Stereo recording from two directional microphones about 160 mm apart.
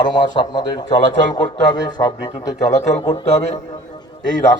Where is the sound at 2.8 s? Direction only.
40° left (ahead or behind).